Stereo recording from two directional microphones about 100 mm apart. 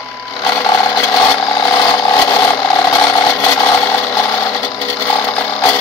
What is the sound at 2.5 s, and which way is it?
Mechanisms, 50° left (ahead or behind).